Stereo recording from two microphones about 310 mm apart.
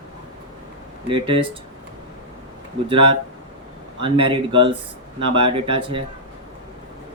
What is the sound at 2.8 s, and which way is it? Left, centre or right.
Speech, centre.